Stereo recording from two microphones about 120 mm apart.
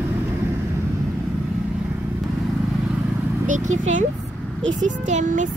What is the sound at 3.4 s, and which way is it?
Speech, 90° right.